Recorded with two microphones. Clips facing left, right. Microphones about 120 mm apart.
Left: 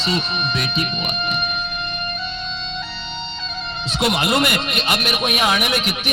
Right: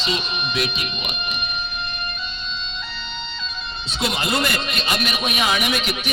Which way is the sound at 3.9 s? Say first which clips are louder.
Left 4 dB; 65° left (ahead or behind).